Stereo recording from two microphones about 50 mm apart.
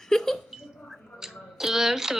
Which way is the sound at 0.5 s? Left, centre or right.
Centre.